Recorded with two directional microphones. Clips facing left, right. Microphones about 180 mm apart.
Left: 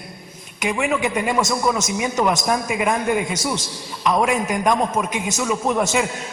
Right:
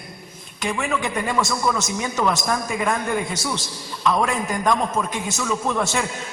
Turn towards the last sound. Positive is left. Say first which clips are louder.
# left 3 dB
turn(degrees=15)  # may be behind; listen again after turning